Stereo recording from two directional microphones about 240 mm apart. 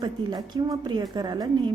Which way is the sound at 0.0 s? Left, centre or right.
Centre.